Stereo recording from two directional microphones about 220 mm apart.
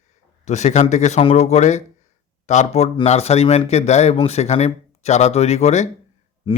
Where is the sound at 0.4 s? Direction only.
30° left (ahead or behind).